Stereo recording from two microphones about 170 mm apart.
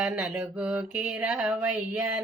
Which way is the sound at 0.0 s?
5° right (ahead or behind).